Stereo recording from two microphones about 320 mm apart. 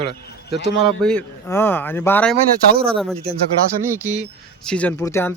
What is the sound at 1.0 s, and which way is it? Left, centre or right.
Speech, centre.